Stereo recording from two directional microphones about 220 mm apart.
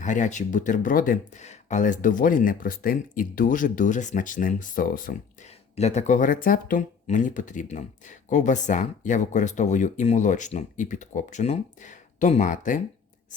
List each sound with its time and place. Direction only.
0.0 s speech: 35° left (ahead or behind)